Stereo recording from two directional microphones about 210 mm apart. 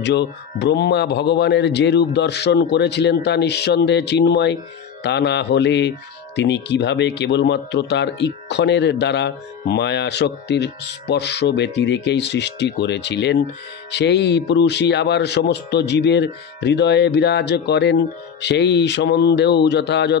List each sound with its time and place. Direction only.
0.0 s speech: 55° left (ahead or behind)